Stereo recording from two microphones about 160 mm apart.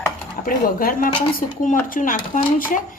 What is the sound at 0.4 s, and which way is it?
A woman's voice, 60° left (ahead or behind).